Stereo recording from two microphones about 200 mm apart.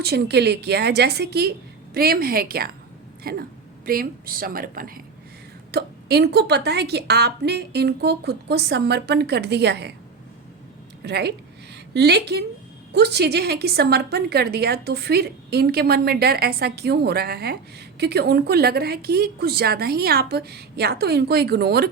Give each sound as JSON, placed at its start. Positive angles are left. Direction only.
{"t": 0.0, "sound": "a woman's voice", "side_deg": -55}
{"t": 11.0, "sound": "a woman's voice", "side_deg": -55}